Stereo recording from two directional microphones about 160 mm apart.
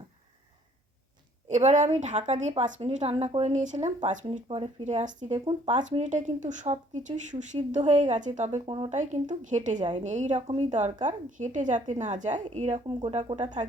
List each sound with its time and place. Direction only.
1.5 s a woman's voice: 50° right (ahead or behind)
4.4 s a woman's voice: 35° right (ahead or behind)
9.0 s a woman's voice: 50° right (ahead or behind)